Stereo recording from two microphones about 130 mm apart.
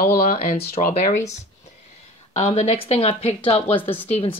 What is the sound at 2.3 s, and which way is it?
Speech, 50° left (ahead or behind).